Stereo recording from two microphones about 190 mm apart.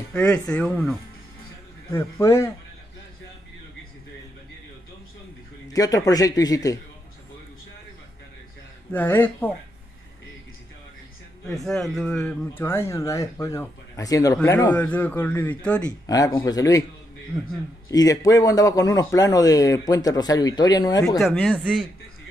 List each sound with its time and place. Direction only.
0.1 s speech: 5° left (ahead or behind)
5.7 s a man's voice: 15° left (ahead or behind)
8.9 s speech: 10° left (ahead or behind)
11.5 s speech: centre (ahead or behind)
16.1 s a man's voice: 20° left (ahead or behind)
17.8 s a man's voice: 20° left (ahead or behind)
21.2 s speech: centre (ahead or behind)